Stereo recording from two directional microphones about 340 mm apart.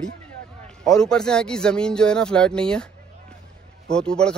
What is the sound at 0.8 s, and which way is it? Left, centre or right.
Speech, centre.